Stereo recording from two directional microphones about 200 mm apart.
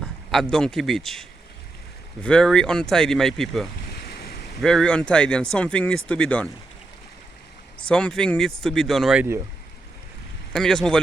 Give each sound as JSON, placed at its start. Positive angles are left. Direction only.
{"t": 0.0, "sound": "a man's voice", "side_deg": 0}
{"t": 4.0, "sound": "boat", "side_deg": 50}
{"t": 4.5, "sound": "speech", "side_deg": 0}
{"t": 7.9, "sound": "speech", "side_deg": 5}
{"t": 10.5, "sound": "speech", "side_deg": 0}